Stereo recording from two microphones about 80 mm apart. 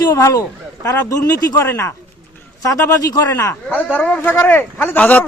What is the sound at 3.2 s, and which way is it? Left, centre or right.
Speech, left.